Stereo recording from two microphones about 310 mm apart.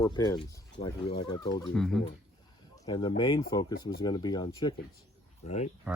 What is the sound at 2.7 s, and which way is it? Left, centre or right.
Speech, centre.